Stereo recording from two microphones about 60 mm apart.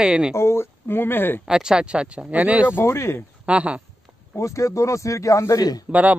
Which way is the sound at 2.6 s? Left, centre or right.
Left.